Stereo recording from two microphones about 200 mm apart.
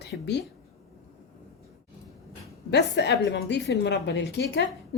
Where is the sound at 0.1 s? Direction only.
55° left (ahead or behind).